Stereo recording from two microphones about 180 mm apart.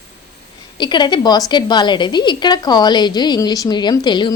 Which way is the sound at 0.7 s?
25° left (ahead or behind).